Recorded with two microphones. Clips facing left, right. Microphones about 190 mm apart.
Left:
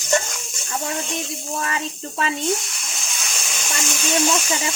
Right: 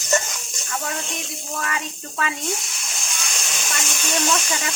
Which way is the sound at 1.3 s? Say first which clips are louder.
Left 2 dB; 25° left (ahead or behind).